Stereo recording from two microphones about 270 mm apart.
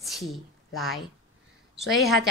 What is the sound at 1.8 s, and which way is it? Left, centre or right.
Speech, left.